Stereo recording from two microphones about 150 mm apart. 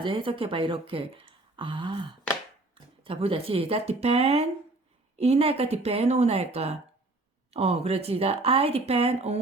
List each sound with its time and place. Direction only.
0.0 s speech: 35° right (ahead or behind)